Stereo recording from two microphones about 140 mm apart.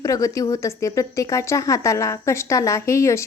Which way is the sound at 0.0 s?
25° left (ahead or behind).